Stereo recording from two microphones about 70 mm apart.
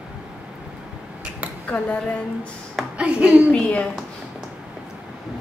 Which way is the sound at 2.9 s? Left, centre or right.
Centre.